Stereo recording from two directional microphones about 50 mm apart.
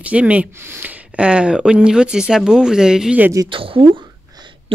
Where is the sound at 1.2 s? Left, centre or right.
Right.